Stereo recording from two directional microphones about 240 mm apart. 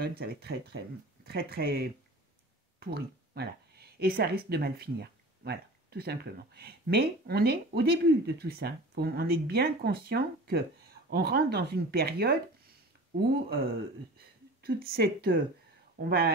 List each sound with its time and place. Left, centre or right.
0.0 s speech: right